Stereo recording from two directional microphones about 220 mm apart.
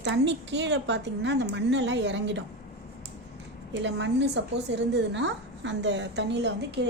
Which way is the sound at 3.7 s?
55° right (ahead or behind).